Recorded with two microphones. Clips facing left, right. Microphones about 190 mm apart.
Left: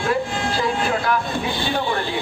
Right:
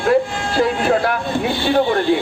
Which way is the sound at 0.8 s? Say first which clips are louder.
Right 4 dB; 60° right (ahead or behind).